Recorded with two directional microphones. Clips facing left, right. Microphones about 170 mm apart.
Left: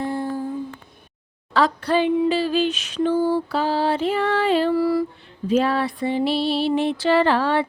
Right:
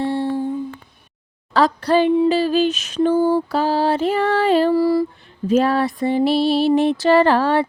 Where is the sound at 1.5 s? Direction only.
40° right (ahead or behind).